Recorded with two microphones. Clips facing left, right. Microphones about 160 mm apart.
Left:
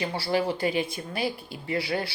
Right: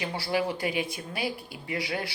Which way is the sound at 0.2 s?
10° right (ahead or behind).